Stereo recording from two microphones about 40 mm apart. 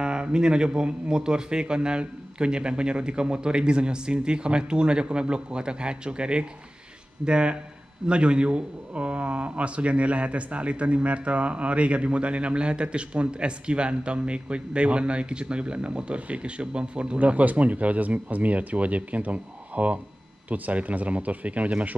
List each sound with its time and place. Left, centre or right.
0.0 s a man's voice: right
17.2 s speech: right